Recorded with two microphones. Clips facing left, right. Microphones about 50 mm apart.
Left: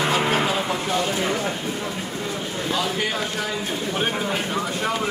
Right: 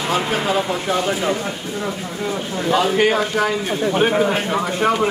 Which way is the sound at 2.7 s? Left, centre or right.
Right.